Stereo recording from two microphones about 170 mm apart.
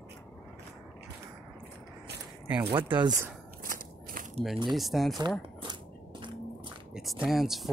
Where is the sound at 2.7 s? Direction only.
25° right (ahead or behind).